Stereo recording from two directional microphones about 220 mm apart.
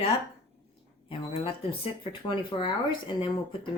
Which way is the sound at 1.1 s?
25° left (ahead or behind).